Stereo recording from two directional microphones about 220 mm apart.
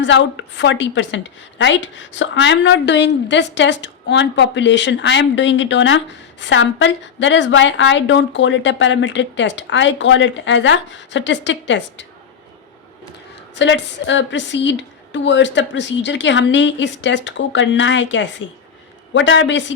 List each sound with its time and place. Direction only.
0.0 s a woman's voice: 55° left (ahead or behind)
13.6 s a woman's voice: 55° left (ahead or behind)